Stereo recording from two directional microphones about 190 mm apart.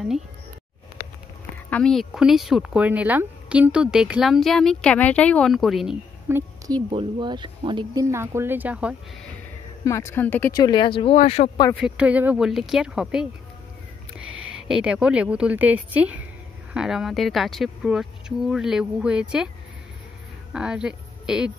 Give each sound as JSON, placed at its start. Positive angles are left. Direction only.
{"t": 1.7, "sound": "speech", "side_deg": 5}
{"t": 6.2, "sound": "a woman's voice", "side_deg": -10}
{"t": 6.9, "sound": "speech", "side_deg": -25}
{"t": 9.8, "sound": "speech", "side_deg": 15}
{"t": 10.6, "sound": "speech", "side_deg": 25}
{"t": 11.7, "sound": "speech", "side_deg": -5}
{"t": 14.6, "sound": "a woman's voice", "side_deg": -5}
{"t": 20.5, "sound": "a woman's voice", "side_deg": -5}